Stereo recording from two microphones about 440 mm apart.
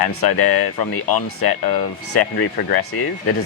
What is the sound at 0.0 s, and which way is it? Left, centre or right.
Speech, left.